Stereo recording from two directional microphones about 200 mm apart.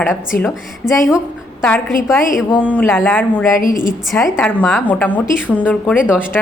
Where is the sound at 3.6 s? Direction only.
45° left (ahead or behind).